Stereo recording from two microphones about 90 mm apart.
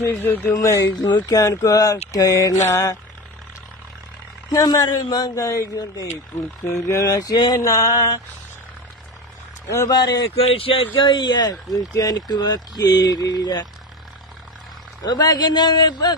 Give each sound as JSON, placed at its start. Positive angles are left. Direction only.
{"t": 0.0, "sound": "speech", "side_deg": 25}
{"t": 0.6, "sound": "speech", "side_deg": 40}
{"t": 4.5, "sound": "speech", "side_deg": 40}
{"t": 6.0, "sound": "speech", "side_deg": 25}
{"t": 9.8, "sound": "speech", "side_deg": 50}
{"t": 10.5, "sound": "speech", "side_deg": 90}
{"t": 15.0, "sound": "speech", "side_deg": 50}